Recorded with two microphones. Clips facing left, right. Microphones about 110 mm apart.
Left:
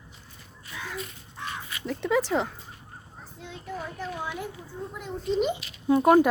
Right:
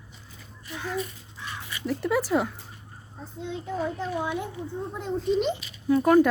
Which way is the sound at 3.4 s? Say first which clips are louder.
Right 7 dB; 25° right (ahead or behind).